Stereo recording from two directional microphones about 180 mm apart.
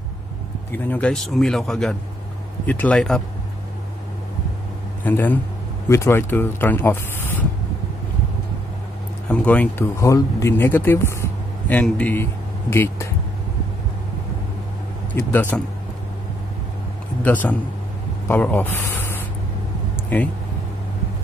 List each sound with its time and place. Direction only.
0.7 s a man's voice: 10° left (ahead or behind)
5.0 s speech: 10° left (ahead or behind)
9.3 s a man's voice: 5° left (ahead or behind)
15.3 s speech: 10° left (ahead or behind)
17.2 s a man's voice: 10° left (ahead or behind)